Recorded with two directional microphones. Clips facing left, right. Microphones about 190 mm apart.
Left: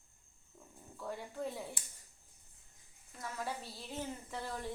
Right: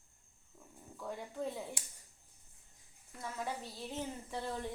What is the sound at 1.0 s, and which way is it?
Speech, 10° right (ahead or behind).